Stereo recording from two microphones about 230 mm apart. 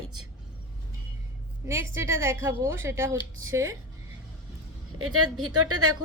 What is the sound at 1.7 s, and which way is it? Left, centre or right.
A woman's voice, centre.